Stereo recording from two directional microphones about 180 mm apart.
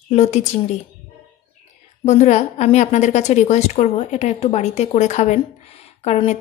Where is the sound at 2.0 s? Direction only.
40° left (ahead or behind).